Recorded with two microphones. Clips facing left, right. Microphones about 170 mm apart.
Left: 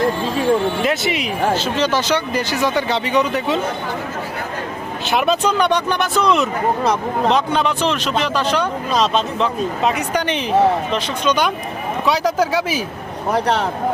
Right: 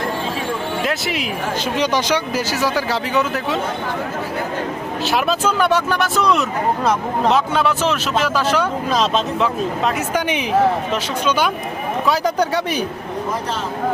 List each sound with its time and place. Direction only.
0.8 s speech: centre (ahead or behind)
1.5 s speech: 15° right (ahead or behind)
5.0 s speech: centre (ahead or behind)
13.3 s speech: 65° left (ahead or behind)